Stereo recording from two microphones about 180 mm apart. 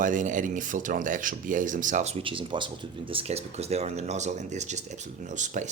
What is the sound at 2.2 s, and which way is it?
Speech, 30° right (ahead or behind).